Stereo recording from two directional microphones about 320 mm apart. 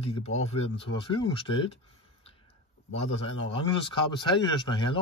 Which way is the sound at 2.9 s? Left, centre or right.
Centre.